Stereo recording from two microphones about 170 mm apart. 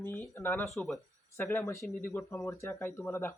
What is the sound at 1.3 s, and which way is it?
Speech, 15° left (ahead or behind).